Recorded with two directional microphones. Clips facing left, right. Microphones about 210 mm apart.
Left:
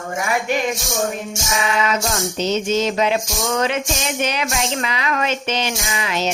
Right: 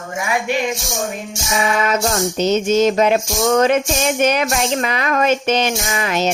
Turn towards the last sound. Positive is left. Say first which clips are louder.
# right 4 dB
turn(degrees=-50)  # may be behind; listen again after turning